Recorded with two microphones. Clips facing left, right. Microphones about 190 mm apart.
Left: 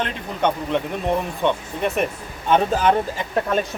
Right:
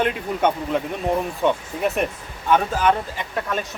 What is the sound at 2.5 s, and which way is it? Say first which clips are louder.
Speech: left 1 dB; 30° left (ahead or behind).